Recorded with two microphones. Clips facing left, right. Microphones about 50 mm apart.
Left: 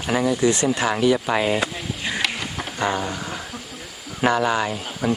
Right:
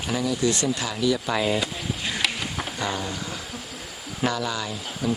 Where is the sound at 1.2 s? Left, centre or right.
Left.